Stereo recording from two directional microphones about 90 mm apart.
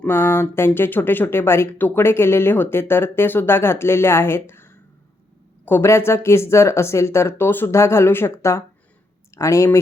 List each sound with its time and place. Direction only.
0.0 s speech: 25° left (ahead or behind)